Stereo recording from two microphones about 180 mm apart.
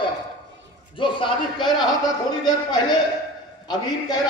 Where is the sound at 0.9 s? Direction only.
25° left (ahead or behind).